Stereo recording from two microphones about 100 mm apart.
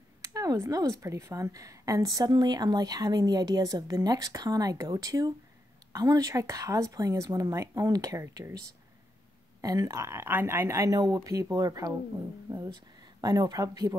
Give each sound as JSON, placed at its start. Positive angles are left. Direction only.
{"t": 0.2, "sound": "a woman's voice", "side_deg": -35}
{"t": 9.6, "sound": "a woman's voice", "side_deg": -35}